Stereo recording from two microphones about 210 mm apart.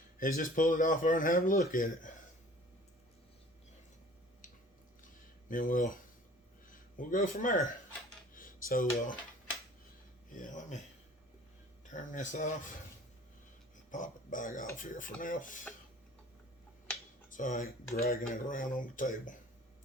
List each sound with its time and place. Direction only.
0.2 s speech: 40° left (ahead or behind)
5.5 s speech: 40° left (ahead or behind)
10.3 s a sound: 40° left (ahead or behind)
11.9 s speech: 35° left (ahead or behind)
13.9 s speech: 40° left (ahead or behind)
17.3 s speech: 40° left (ahead or behind)